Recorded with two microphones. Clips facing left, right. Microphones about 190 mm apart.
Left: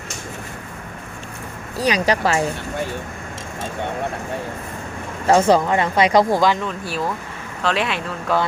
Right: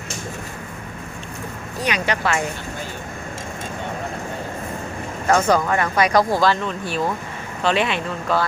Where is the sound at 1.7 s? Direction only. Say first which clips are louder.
Left 5 dB; 35° left (ahead or behind).